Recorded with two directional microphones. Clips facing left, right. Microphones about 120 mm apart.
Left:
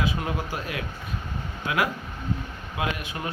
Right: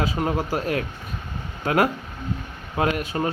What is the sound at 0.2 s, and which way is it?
Speech, 35° right (ahead or behind).